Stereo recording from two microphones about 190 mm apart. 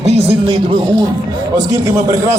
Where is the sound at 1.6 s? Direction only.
20° right (ahead or behind).